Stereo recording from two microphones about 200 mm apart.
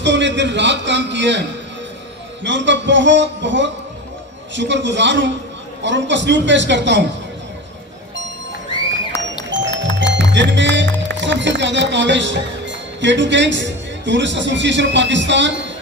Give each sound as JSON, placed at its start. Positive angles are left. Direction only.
{"t": 0.0, "sound": "speech", "side_deg": -65}
{"t": 9.1, "sound": "music", "side_deg": 15}
{"t": 9.5, "sound": "music", "side_deg": -65}
{"t": 11.1, "sound": "speech", "side_deg": -65}